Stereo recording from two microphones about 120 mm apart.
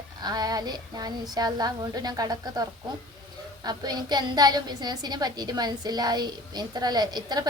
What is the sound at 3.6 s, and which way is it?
A woman's voice, 35° right (ahead or behind).